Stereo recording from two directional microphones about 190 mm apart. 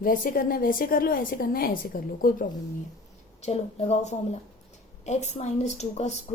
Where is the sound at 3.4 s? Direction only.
35° left (ahead or behind).